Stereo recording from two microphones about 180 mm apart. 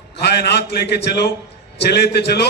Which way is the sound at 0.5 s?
70° left (ahead or behind).